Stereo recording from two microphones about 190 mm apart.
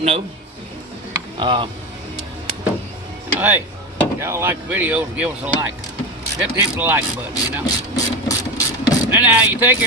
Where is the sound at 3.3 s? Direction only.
10° right (ahead or behind).